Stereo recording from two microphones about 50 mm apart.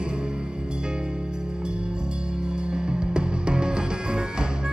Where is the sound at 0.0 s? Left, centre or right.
Right.